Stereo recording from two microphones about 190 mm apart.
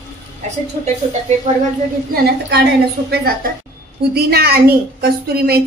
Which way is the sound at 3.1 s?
50° right (ahead or behind).